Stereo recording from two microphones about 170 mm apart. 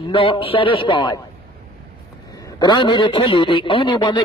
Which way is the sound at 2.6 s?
25° left (ahead or behind).